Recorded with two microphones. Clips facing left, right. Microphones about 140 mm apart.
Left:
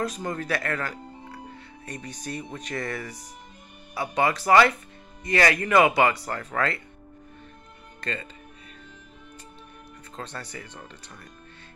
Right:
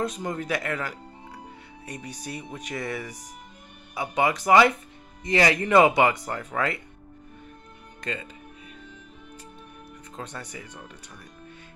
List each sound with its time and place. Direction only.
0.0 s speech: 20° right (ahead or behind)
8.0 s speech: 10° right (ahead or behind)
10.1 s speech: 15° right (ahead or behind)